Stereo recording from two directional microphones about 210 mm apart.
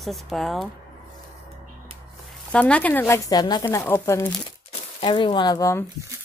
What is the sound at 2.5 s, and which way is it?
Speech, 5° left (ahead or behind).